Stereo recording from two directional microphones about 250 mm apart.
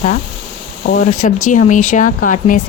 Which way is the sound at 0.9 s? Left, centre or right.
Left.